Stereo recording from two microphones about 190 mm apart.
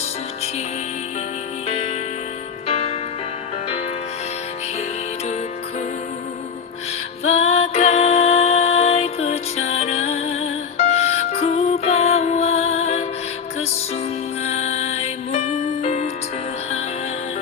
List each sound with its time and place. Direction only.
1.6 s music: 35° left (ahead or behind)
7.3 s music: 35° left (ahead or behind)
14.4 s music: 35° left (ahead or behind)